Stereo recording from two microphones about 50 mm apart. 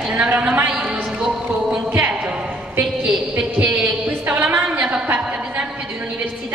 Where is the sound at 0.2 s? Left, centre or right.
Right.